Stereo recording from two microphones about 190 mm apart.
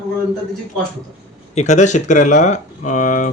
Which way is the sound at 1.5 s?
40° left (ahead or behind).